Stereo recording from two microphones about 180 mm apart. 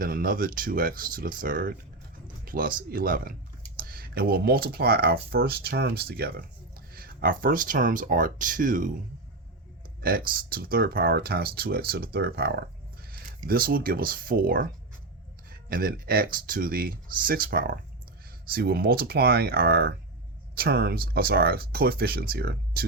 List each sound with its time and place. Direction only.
0.0 s speech: 55° right (ahead or behind)
10.0 s speech: 55° right (ahead or behind)
13.5 s speech: 55° right (ahead or behind)